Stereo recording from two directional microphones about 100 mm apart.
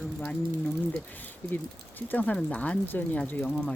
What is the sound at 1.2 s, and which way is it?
Speech, 20° left (ahead or behind).